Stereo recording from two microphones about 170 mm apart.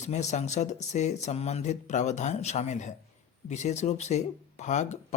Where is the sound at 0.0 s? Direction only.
45° left (ahead or behind).